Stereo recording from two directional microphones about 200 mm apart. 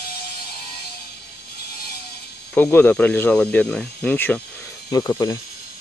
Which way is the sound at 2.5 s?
10° left (ahead or behind).